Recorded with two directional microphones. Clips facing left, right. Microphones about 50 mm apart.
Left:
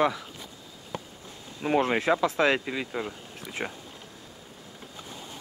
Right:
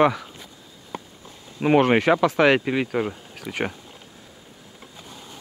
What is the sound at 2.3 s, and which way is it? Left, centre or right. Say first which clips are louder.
Speech: right 6 dB; right.